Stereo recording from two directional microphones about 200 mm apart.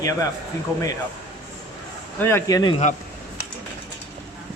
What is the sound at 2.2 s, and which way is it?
Speech, 10° left (ahead or behind).